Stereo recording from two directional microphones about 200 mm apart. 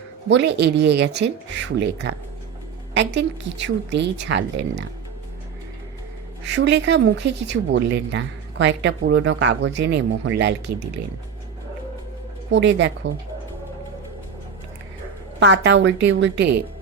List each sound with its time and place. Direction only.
0.3 s speech: 60° right (ahead or behind)
6.4 s speech: 60° right (ahead or behind)
12.5 s speech: 65° right (ahead or behind)
15.4 s speech: 60° right (ahead or behind)